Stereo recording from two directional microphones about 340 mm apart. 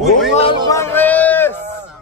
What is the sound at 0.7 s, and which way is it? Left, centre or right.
Speech, centre.